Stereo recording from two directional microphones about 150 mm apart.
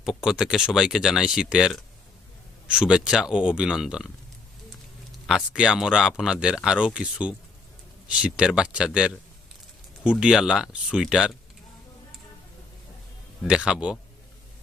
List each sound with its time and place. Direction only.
0.0 s speech: 5° right (ahead or behind)
5.2 s a man's voice: 5° right (ahead or behind)
13.4 s a man's voice: 5° right (ahead or behind)